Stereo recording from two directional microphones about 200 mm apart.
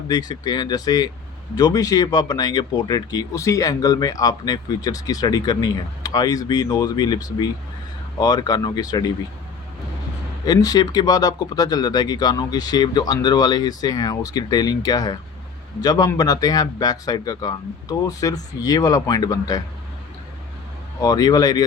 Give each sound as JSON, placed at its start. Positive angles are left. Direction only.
{"t": 0.1, "sound": "speech", "side_deg": 20}
{"t": 10.4, "sound": "speech", "side_deg": 20}
{"t": 21.0, "sound": "speech", "side_deg": 20}